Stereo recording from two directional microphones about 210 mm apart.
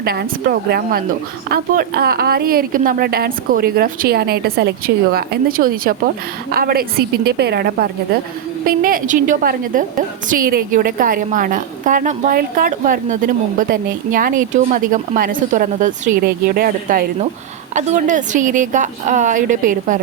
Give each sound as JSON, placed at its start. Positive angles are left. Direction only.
{"t": 0.0, "sound": "a woman's voice", "side_deg": -45}